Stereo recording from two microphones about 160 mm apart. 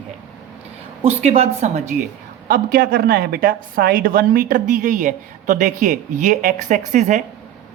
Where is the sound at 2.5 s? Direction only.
65° right (ahead or behind).